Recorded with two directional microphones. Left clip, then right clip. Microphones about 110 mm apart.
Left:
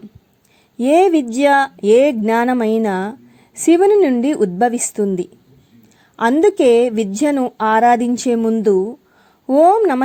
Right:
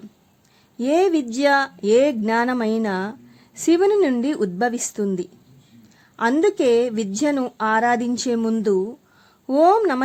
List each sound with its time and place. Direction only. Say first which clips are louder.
0.8 s a woman's voice: left 6 dB; 35° left (ahead or behind)
6.4 s a woman's voice: left 6 dB; 35° left (ahead or behind)
8.4 s a woman's voice: left 6 dB; 20° left (ahead or behind)
8.6 s a woman's voice: left 6 dB; 35° left (ahead or behind)